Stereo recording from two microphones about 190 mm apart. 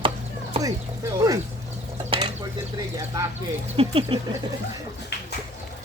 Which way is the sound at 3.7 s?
30° right (ahead or behind).